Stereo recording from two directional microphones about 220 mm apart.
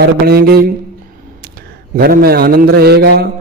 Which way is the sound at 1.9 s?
45° right (ahead or behind).